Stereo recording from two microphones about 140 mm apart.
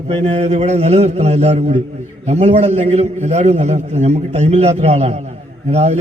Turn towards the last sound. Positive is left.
turn(degrees=-50)  # may be behind; listen again after turning